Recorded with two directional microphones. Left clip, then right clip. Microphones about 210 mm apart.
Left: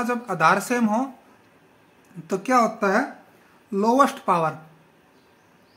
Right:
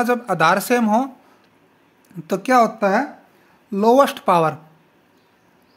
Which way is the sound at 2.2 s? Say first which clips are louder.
Right 5 dB; 45° right (ahead or behind).